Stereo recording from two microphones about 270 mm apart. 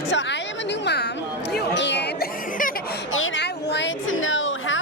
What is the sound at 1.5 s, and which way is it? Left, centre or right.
Chatter, left.